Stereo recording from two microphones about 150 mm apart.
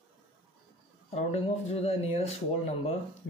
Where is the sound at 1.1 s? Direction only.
40° left (ahead or behind).